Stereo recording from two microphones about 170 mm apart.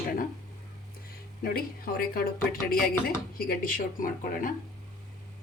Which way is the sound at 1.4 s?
60° left (ahead or behind).